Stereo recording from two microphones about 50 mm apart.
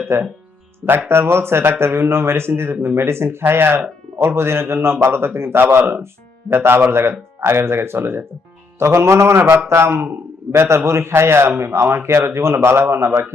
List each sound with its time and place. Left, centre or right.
0.1 s a man's voice: right
0.9 s speech: right
1.1 s a man's voice: right
8.8 s a man's voice: right